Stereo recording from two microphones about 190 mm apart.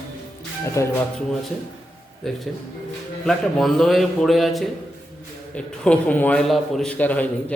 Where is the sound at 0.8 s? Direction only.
15° left (ahead or behind).